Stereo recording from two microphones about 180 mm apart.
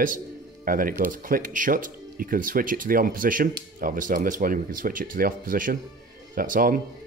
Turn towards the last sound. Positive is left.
turn(degrees=-50)  # may be behind; listen again after turning